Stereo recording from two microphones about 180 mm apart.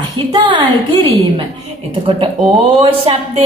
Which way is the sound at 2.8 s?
30° right (ahead or behind).